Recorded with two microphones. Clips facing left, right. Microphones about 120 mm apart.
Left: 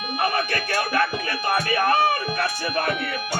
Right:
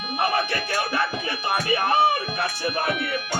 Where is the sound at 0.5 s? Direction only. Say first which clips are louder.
Left 2 dB; 25° right (ahead or behind).